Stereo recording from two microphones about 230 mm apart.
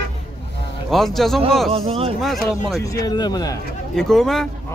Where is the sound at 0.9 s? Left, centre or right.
Centre.